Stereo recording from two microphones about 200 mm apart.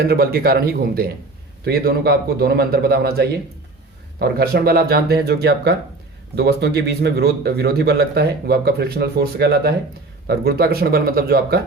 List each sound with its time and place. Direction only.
0.0 s speech: 50° right (ahead or behind)